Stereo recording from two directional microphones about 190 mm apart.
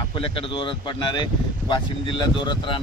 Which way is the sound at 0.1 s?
25° left (ahead or behind).